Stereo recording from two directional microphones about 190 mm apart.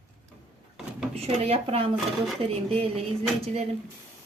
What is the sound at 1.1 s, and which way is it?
Speech, 30° right (ahead or behind).